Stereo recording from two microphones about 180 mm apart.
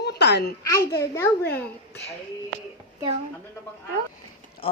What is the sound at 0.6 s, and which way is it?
A child's voice, 20° left (ahead or behind).